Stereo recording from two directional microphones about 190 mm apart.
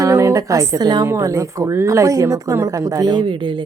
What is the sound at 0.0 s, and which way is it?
A woman's voice, 15° right (ahead or behind).